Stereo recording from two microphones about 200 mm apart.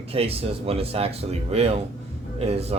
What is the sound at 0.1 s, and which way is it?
Speech, 30° right (ahead or behind).